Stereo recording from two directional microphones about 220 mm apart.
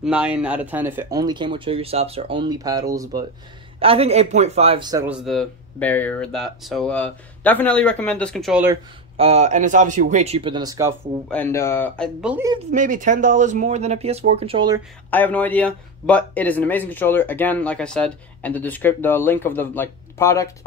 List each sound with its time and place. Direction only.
0.0 s speech: 5° right (ahead or behind)
3.8 s speech: 25° right (ahead or behind)
5.0 s speech: centre (ahead or behind)
9.1 s speech: 30° right (ahead or behind)
11.2 s speech: 10° left (ahead or behind)
12.2 s speech: 5° right (ahead or behind)
12.7 s speech: 35° right (ahead or behind)
15.0 s speech: 10° left (ahead or behind)